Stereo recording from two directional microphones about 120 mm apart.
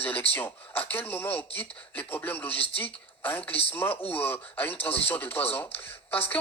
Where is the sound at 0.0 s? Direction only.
15° left (ahead or behind).